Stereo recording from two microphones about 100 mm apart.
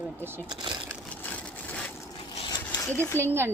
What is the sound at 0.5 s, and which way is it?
Speech, 45° right (ahead or behind).